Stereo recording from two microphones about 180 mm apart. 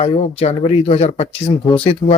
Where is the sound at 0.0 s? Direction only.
35° left (ahead or behind).